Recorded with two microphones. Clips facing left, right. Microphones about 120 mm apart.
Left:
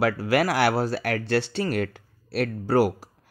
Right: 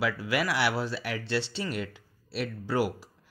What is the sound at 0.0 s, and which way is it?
Speech, 45° left (ahead or behind).